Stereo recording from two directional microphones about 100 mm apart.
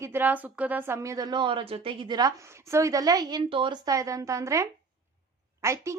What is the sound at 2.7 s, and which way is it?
Speech, 35° right (ahead or behind).